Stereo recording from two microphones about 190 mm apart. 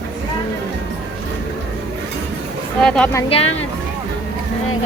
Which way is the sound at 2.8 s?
5° left (ahead or behind).